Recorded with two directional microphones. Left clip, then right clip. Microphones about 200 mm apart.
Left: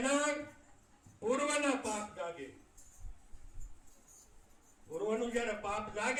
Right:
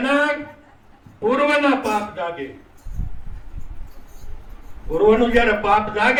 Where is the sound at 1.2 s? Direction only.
45° right (ahead or behind).